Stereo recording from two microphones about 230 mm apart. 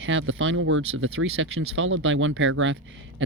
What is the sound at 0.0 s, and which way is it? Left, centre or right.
Speech, right.